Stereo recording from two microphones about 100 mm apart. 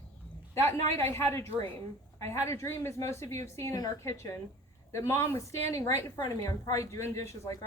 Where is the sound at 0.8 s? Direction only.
30° left (ahead or behind).